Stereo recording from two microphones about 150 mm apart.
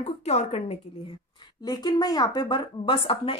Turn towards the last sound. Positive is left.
turn(degrees=35)  # may be behind; listen again after turning